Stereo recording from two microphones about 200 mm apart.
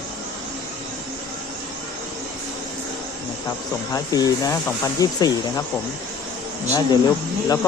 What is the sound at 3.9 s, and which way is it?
Speech, 20° left (ahead or behind).